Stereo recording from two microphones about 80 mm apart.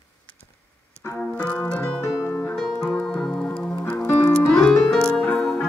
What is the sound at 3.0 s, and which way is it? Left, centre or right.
Music, centre.